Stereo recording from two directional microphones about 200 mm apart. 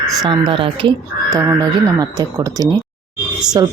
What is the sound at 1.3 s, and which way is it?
Speech, 15° right (ahead or behind).